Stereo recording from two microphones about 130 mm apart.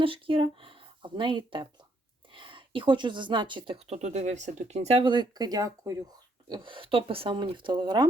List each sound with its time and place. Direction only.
0.0 s speech: 45° right (ahead or behind)
3.8 s speech: 55° right (ahead or behind); by 6.1 s 25° right (ahead or behind)
6.5 s speech: 40° right (ahead or behind)